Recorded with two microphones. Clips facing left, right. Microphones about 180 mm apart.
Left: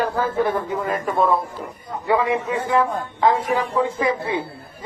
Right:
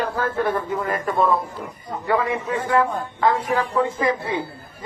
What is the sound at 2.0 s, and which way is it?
A man's voice, 15° left (ahead or behind).